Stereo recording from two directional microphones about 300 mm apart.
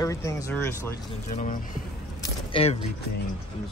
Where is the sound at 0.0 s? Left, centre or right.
Centre.